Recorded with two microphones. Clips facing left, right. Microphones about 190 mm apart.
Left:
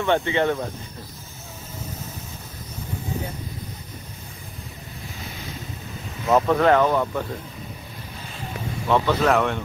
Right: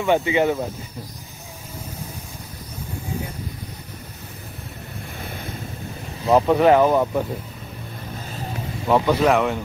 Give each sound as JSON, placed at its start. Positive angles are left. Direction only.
{"t": 0.0, "sound": "speech", "side_deg": -10}
{"t": 5.2, "sound": "wind noise", "side_deg": -55}
{"t": 6.2, "sound": "speech", "side_deg": -30}
{"t": 6.5, "sound": "speech", "side_deg": -15}
{"t": 8.8, "sound": "speech", "side_deg": -15}